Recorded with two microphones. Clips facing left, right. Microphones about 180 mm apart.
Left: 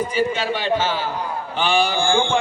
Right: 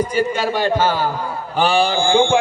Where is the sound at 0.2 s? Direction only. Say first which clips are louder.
Right 2 dB; 45° right (ahead or behind).